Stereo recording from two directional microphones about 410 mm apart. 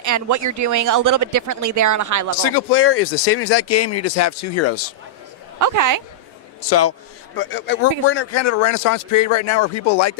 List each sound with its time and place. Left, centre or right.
0.0 s speech: right
2.5 s speech: left
5.5 s speech: right
6.7 s speech: left